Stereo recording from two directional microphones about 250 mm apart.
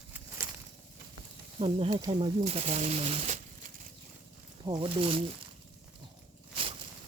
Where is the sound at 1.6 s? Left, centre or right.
Right.